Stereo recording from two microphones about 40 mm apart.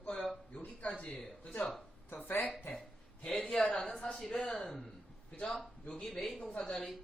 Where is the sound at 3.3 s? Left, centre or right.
Centre.